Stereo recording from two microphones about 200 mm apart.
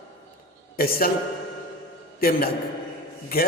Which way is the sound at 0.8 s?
45° left (ahead or behind).